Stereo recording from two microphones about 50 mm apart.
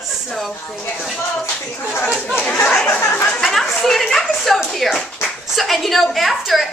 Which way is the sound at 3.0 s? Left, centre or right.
Left.